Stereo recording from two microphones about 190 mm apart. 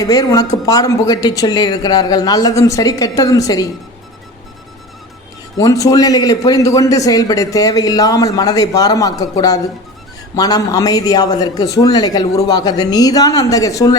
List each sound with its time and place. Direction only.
0.0 s a man's voice: 20° left (ahead or behind)
5.5 s a man's voice: 20° left (ahead or behind)